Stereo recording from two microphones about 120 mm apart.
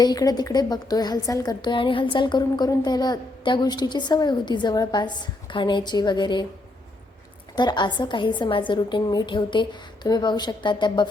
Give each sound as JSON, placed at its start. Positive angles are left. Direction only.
{"t": 0.0, "sound": "a woman's voice", "side_deg": 35}
{"t": 7.5, "sound": "a woman's voice", "side_deg": 40}